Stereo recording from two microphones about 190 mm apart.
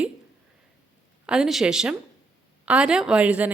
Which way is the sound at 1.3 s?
Centre (ahead or behind).